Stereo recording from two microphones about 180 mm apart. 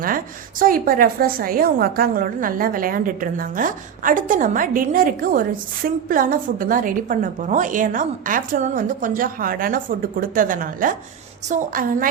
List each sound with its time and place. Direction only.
0.6 s a woman's voice: 50° right (ahead or behind)